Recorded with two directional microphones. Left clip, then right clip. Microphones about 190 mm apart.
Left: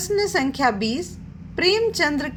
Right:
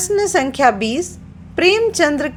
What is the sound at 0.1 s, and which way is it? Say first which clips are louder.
A woman's voice: right 5 dB; 15° right (ahead or behind).